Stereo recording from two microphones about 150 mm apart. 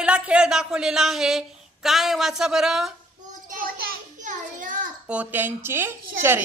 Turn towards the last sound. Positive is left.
turn(degrees=-15)  # may be behind; listen again after turning